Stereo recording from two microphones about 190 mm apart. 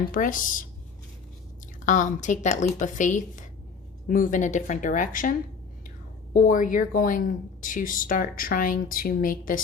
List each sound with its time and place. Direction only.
0.1 s speech: 45° left (ahead or behind)
1.8 s speech: 40° left (ahead or behind)
6.3 s speech: 45° left (ahead or behind)